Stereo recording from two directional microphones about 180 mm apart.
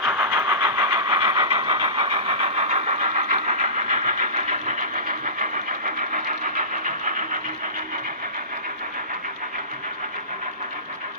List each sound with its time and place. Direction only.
0.0 s vehicle: 5° right (ahead or behind)
0.5 s engine: 20° right (ahead or behind); by 7.2 s 45° right (ahead or behind)